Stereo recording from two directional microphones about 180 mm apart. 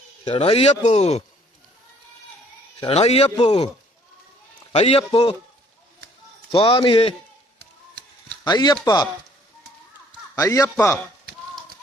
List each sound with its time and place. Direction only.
0.3 s speech: 30° left (ahead or behind)
2.8 s speech: 35° left (ahead or behind)
4.7 s speech: 35° left (ahead or behind)
6.5 s a man's voice: 30° left (ahead or behind)
8.4 s a man's voice: 25° left (ahead or behind)
10.3 s speech: 20° left (ahead or behind)